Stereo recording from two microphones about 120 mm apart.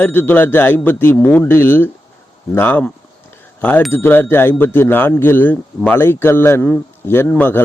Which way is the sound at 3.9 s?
15° left (ahead or behind).